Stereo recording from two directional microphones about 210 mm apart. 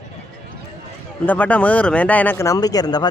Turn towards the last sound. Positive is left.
turn(degrees=20)  # may be behind; listen again after turning